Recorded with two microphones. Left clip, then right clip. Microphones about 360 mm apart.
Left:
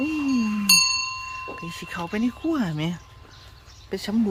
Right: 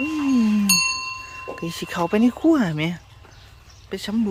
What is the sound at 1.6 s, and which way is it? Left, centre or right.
Speech, centre.